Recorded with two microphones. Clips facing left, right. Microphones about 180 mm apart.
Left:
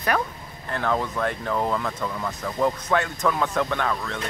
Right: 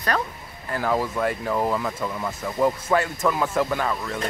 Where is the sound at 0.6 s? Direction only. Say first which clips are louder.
Right 1 dB; 5° right (ahead or behind).